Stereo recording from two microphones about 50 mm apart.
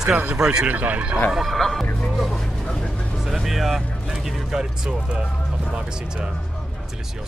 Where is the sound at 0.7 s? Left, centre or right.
Right.